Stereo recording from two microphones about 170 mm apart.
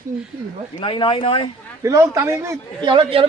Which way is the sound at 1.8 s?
15° right (ahead or behind).